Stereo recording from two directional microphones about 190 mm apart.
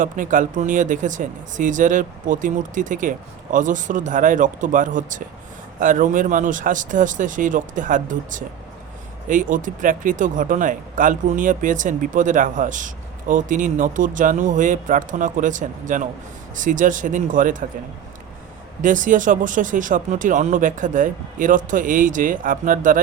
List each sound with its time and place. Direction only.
0.0 s speech: 45° right (ahead or behind)
18.8 s speech: 45° right (ahead or behind)